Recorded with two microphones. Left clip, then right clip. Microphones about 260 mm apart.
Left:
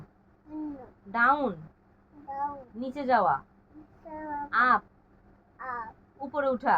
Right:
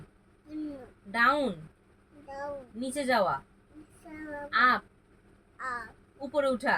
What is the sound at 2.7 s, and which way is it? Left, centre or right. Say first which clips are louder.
Speech: left 2 dB; right.